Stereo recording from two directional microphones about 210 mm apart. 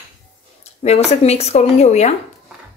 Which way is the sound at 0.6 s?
30° left (ahead or behind).